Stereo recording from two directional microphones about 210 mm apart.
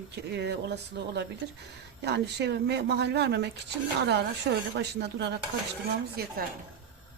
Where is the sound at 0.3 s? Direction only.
55° right (ahead or behind).